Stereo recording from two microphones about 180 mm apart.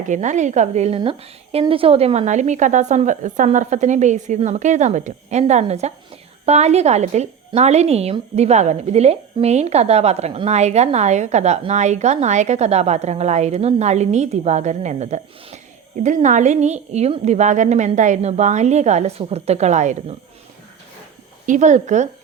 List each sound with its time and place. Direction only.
0.0 s a woman's voice: 45° right (ahead or behind)
21.4 s speech: 45° right (ahead or behind)